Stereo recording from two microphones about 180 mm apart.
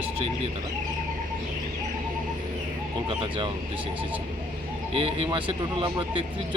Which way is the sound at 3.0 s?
30° right (ahead or behind).